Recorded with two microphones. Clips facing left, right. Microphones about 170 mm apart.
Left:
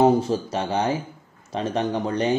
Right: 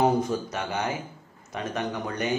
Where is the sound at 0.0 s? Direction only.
25° left (ahead or behind).